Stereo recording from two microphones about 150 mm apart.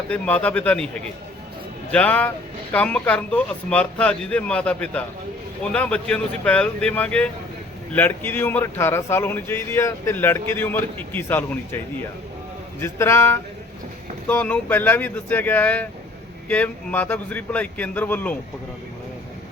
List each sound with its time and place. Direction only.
0.1 s speech: 10° left (ahead or behind)
12.8 s speech: 15° left (ahead or behind)